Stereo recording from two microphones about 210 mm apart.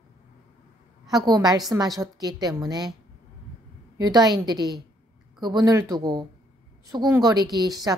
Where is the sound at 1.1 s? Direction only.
20° right (ahead or behind).